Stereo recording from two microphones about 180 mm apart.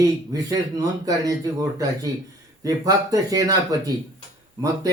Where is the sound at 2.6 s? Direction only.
20° right (ahead or behind).